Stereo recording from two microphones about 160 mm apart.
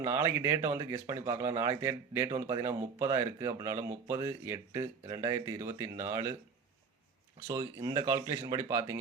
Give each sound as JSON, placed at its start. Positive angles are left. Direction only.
{"t": 0.0, "sound": "speech", "side_deg": -15}
{"t": 7.4, "sound": "speech", "side_deg": -25}